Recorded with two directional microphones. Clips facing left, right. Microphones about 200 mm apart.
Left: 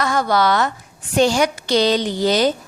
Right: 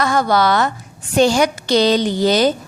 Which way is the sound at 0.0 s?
35° right (ahead or behind).